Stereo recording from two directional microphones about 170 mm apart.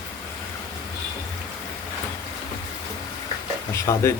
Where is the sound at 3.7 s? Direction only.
15° left (ahead or behind).